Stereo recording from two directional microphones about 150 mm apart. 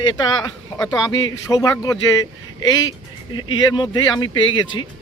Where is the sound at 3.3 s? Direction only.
30° left (ahead or behind).